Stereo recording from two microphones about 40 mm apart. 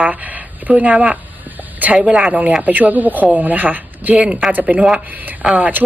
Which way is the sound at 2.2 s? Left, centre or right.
Right.